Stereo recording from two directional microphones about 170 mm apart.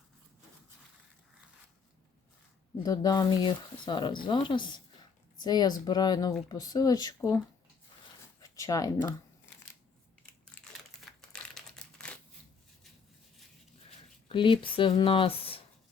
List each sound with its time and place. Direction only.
2.8 s a woman's voice: 20° left (ahead or behind)
8.4 s speech: 20° left (ahead or behind)
11.0 s crumpling: 5° left (ahead or behind)
14.3 s speech: 30° left (ahead or behind)